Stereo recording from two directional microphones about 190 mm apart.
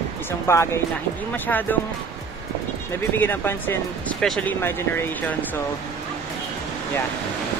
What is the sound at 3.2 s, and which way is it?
Speech, 10° left (ahead or behind).